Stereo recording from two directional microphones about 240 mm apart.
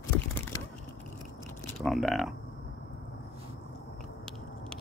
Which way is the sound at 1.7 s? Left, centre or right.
Centre.